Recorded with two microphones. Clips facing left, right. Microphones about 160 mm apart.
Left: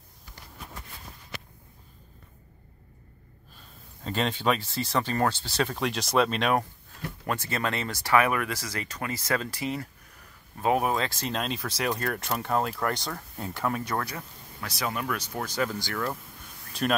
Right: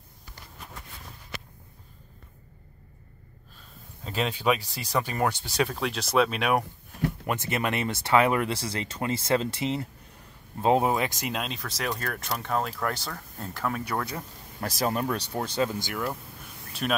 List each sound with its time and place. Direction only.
4.0 s speech: 5° right (ahead or behind)
5.7 s speech: centre (ahead or behind)
7.2 s speech: 20° right (ahead or behind)
11.3 s speech: centre (ahead or behind)
14.6 s speech: 45° right (ahead or behind); by 16.2 s 15° right (ahead or behind)